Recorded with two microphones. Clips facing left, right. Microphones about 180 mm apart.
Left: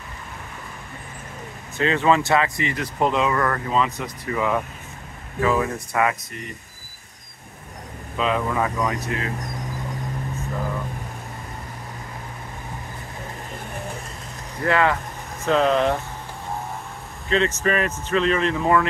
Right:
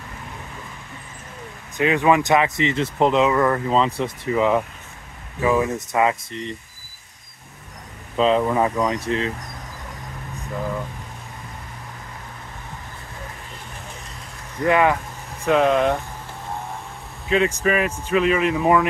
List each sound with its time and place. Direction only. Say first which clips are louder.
1.8 s speech: right 2 dB; 15° right (ahead or behind)
3.7 s speech: right 3 dB; 30° right (ahead or behind)
8.2 s speech: right 5 dB; 30° right (ahead or behind)
14.6 s speech: right 3 dB; 15° right (ahead or behind)
17.3 s speech: right 2 dB; 10° right (ahead or behind)